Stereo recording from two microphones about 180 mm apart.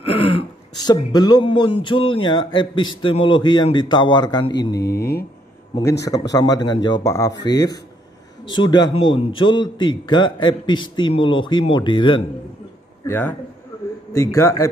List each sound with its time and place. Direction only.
0.1 s a man's voice: 30° left (ahead or behind)
4.7 s speech: 65° left (ahead or behind)
6.0 s a man's voice: 20° left (ahead or behind)
13.0 s a man's voice: 10° left (ahead or behind)